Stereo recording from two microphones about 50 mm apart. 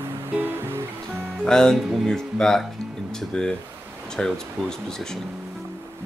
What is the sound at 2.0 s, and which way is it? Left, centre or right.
Speech, centre.